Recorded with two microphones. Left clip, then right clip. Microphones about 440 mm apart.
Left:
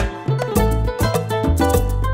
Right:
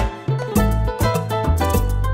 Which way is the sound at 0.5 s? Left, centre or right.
Left.